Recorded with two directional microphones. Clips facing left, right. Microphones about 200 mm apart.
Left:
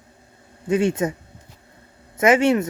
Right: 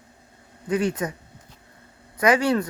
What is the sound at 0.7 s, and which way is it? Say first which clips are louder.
Speech: left 4 dB; 25° left (ahead or behind).